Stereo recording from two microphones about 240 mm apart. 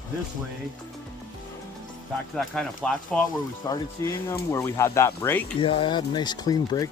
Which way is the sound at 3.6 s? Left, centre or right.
Centre.